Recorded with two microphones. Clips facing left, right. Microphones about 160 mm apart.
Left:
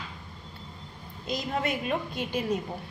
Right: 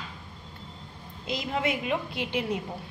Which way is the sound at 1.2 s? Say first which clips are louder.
Right 1 dB; 20° right (ahead or behind).